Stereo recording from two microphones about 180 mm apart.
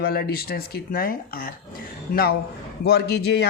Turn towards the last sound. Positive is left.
turn(degrees=65)  # may be behind; listen again after turning